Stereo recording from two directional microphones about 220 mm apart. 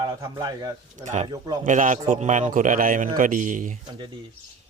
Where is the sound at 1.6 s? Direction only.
35° right (ahead or behind).